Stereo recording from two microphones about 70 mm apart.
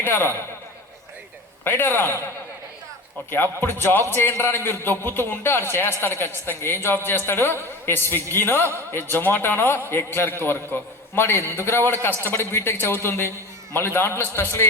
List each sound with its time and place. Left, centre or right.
0.0 s a man's voice: left
1.6 s a man's voice: left
3.2 s a man's voice: left